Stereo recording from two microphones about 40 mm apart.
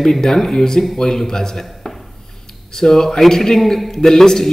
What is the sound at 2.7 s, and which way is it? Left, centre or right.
Speech, centre.